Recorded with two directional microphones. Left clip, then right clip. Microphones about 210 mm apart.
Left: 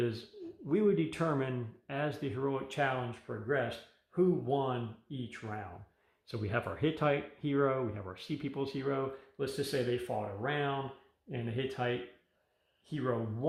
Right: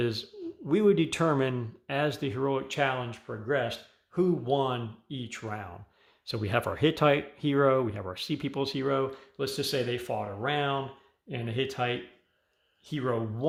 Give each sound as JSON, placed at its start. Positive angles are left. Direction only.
{"t": 0.6, "sound": "speech", "side_deg": -35}